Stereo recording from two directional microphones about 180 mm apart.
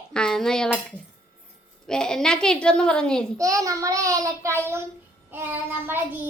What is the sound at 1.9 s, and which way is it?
A woman's voice, 5° left (ahead or behind).